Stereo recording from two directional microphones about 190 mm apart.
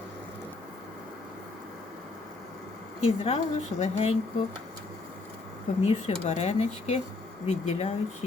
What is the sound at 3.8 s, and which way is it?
Speech, 35° left (ahead or behind).